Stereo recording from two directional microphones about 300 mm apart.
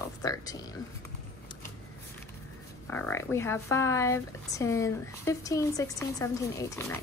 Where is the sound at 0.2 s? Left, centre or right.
Centre.